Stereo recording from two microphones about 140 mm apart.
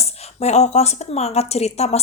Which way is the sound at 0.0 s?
50° left (ahead or behind).